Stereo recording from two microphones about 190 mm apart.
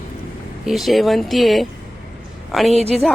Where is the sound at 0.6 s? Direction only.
Centre (ahead or behind).